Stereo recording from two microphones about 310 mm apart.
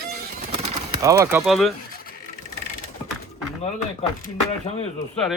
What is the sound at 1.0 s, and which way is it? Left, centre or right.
Speech, centre.